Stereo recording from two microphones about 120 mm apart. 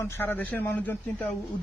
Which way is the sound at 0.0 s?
15° left (ahead or behind).